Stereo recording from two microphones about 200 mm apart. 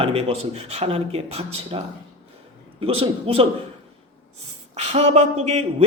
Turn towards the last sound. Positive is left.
turn(degrees=-35)  # may be behind; listen again after turning